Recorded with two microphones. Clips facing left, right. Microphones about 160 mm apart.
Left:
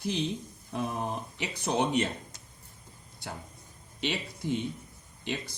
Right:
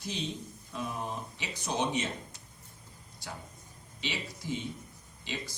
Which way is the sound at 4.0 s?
60° left (ahead or behind).